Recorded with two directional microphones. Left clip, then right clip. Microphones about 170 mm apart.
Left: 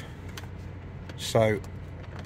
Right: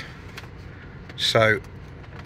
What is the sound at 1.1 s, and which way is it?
Speech, 15° left (ahead or behind).